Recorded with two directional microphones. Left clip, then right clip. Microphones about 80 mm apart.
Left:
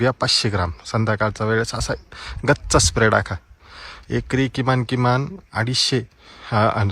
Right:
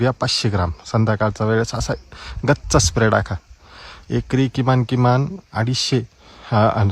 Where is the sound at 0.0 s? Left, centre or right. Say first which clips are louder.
Left 1 dB; right.